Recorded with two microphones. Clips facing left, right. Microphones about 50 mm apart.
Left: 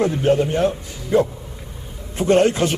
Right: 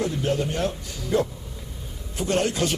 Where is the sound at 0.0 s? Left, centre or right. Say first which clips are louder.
Left 8 dB; left.